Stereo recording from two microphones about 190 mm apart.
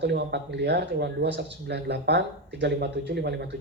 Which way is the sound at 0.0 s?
65° right (ahead or behind).